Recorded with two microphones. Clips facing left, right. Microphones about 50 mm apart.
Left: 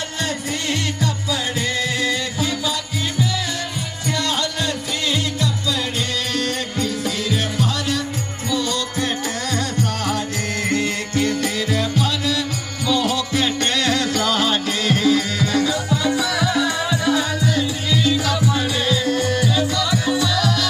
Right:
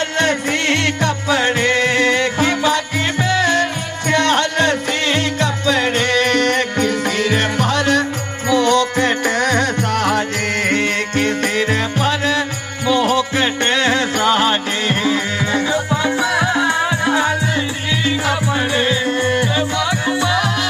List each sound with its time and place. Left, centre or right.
0.2 s music: right